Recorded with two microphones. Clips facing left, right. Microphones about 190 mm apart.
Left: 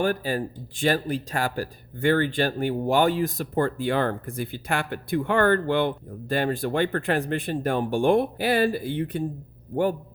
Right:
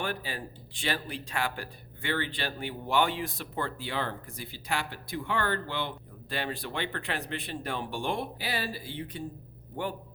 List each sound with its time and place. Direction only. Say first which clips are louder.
0.0 s speech: left 10 dB; 45° left (ahead or behind)